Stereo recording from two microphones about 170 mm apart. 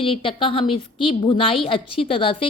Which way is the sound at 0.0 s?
30° left (ahead or behind).